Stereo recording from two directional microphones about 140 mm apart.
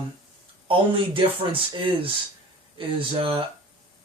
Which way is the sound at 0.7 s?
40° right (ahead or behind).